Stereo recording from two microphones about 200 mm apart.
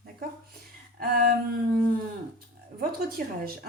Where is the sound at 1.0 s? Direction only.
45° right (ahead or behind).